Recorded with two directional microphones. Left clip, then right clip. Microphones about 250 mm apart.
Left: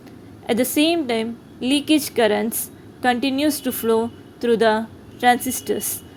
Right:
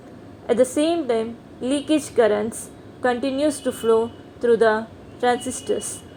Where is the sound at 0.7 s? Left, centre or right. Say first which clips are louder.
Left 1 dB; left.